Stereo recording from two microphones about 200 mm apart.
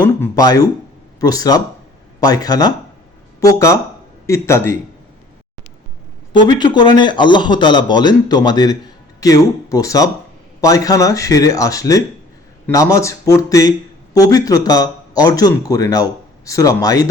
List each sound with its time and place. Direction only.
0.0 s a man's voice: 20° left (ahead or behind)
6.3 s a man's voice: 20° left (ahead or behind)